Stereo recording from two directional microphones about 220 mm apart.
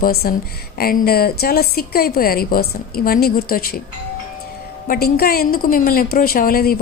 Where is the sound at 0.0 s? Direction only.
45° left (ahead or behind).